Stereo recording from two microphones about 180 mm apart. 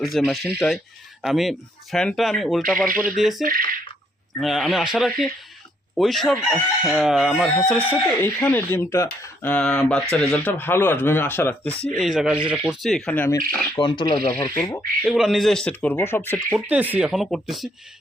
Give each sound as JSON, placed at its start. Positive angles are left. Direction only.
{"t": 0.0, "sound": "chicken", "side_deg": 0}
{"t": 9.2, "sound": "speech", "side_deg": 10}
{"t": 13.7, "sound": "speech", "side_deg": 25}
{"t": 15.0, "sound": "chicken", "side_deg": 0}
{"t": 16.5, "sound": "chicken", "side_deg": -5}